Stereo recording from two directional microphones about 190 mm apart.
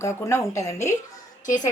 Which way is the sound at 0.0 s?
15° left (ahead or behind).